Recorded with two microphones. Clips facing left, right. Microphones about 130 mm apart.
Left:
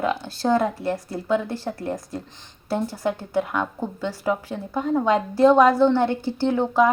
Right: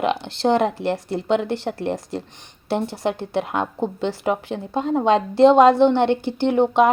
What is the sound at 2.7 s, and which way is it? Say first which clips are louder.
A woman's voice: right 2 dB; 25° right (ahead or behind).